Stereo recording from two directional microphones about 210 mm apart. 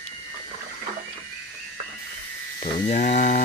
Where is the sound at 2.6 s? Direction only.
35° left (ahead or behind).